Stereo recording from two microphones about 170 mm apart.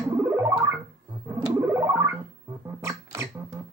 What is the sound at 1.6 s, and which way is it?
Music, 15° right (ahead or behind).